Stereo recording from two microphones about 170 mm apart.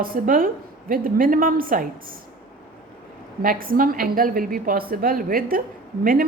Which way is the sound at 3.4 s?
55° right (ahead or behind).